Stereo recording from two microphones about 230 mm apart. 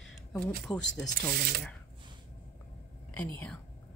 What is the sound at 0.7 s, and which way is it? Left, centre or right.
Speech, centre.